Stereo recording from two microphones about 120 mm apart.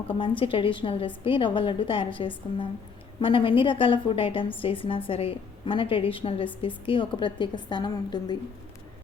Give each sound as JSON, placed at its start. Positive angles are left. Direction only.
{"t": 0.1, "sound": "a woman's voice", "side_deg": 45}